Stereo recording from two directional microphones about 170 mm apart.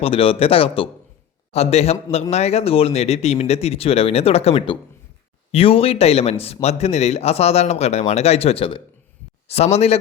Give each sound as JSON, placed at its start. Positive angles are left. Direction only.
{"t": 0.0, "sound": "speech", "side_deg": 35}